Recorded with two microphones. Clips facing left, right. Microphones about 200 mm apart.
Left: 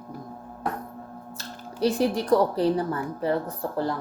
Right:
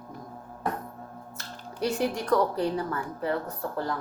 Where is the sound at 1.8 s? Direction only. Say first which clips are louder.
Left 4 dB; 30° left (ahead or behind).